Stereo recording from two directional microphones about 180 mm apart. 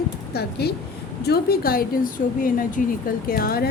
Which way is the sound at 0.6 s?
60° left (ahead or behind).